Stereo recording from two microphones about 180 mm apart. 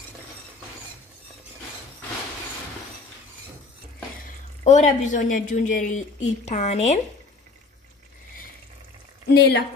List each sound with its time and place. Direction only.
4.6 s a woman's voice: 40° left (ahead or behind)
9.3 s speech: 65° left (ahead or behind)